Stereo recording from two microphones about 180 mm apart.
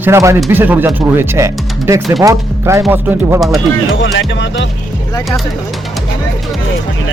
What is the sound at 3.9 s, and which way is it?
Music, 90° left.